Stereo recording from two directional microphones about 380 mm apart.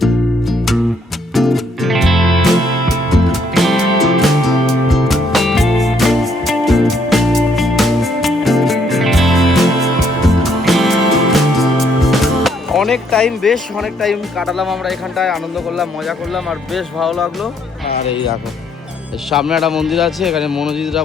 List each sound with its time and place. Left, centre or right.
0.0 s music: centre
17.9 s speech: centre
19.3 s speech: centre